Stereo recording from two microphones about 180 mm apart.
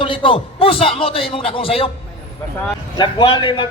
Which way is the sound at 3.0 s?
25° left (ahead or behind).